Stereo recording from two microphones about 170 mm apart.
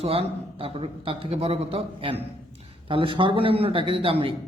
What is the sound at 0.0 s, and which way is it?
A man's voice, 35° right (ahead or behind).